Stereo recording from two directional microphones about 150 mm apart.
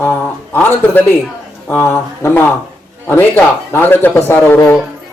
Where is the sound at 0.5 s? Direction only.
15° left (ahead or behind).